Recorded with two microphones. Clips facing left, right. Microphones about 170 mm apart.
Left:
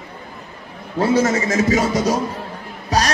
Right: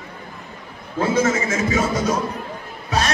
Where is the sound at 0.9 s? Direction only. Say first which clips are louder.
Left 2 dB; 40° left (ahead or behind).